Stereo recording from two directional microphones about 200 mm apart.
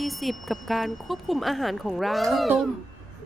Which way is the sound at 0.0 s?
Centre (ahead or behind).